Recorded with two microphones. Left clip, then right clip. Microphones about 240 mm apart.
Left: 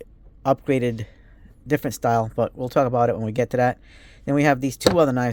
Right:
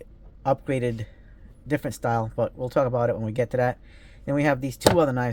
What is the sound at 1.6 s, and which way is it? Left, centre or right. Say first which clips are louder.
Speech: left 4 dB; left.